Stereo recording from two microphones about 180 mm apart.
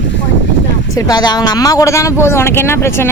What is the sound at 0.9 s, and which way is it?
Speech, 20° left (ahead or behind).